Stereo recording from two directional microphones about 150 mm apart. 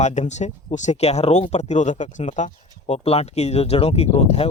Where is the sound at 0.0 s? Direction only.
50° left (ahead or behind).